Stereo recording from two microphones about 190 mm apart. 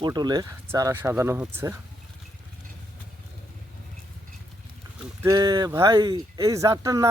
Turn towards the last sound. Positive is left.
turn(degrees=-15)  # may be behind; listen again after turning